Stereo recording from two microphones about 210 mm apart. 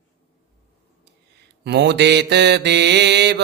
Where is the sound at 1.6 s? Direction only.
55° right (ahead or behind).